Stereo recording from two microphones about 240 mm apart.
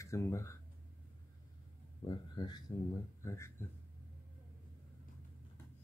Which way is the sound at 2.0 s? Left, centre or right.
Centre.